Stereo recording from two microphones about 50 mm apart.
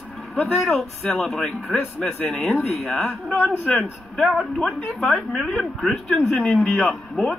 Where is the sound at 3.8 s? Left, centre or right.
Centre.